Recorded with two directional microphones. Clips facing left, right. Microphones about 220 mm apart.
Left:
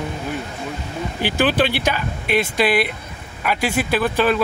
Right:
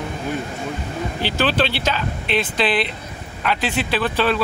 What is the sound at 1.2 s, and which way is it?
Speech, 15° left (ahead or behind).